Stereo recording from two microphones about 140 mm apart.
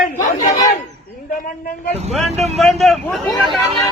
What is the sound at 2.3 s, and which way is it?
Speech, 50° right (ahead or behind).